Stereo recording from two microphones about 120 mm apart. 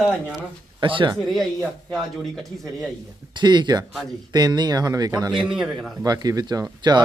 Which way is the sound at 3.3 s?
40° right (ahead or behind).